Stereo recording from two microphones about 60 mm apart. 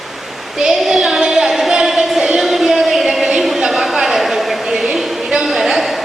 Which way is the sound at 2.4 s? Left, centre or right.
Centre.